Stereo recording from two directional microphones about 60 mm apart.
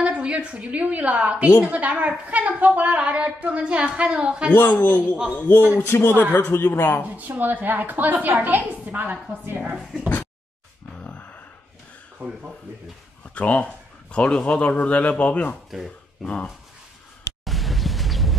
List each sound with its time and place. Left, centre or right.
0.0 s a woman's voice: right
4.6 s a man's voice: left
5.8 s speech: left
7.2 s a woman's voice: right
11.1 s a sound: left
12.2 s a woman's voice: right
13.3 s a man's voice: left
17.5 s a sound: centre